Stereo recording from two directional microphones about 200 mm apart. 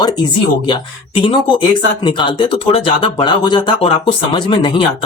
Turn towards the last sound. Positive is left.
turn(degrees=25)  # may be behind; listen again after turning